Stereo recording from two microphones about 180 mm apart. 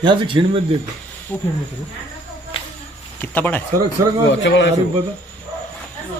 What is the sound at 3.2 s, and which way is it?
Speech, 10° left (ahead or behind).